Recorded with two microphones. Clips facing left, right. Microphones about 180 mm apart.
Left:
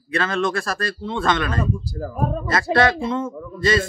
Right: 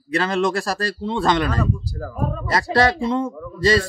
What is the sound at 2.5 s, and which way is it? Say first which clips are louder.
Speech: right 1 dB; 35° right (ahead or behind).